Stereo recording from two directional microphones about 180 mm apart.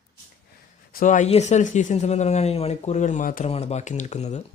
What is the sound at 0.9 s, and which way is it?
Speech, 45° left (ahead or behind).